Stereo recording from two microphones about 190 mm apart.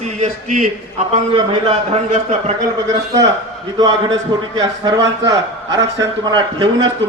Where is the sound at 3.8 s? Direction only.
20° right (ahead or behind).